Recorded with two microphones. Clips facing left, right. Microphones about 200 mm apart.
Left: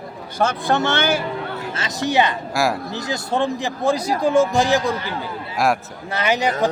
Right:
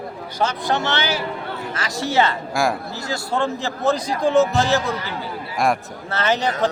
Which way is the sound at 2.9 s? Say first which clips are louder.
Left 2 dB; 20° left (ahead or behind).